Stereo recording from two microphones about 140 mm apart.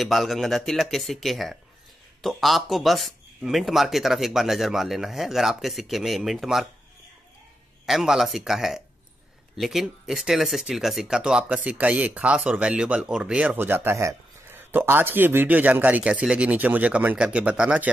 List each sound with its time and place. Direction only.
0.0 s speech: centre (ahead or behind)
7.8 s speech: 5° right (ahead or behind)